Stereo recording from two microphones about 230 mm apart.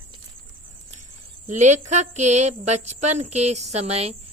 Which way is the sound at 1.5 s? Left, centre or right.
Right.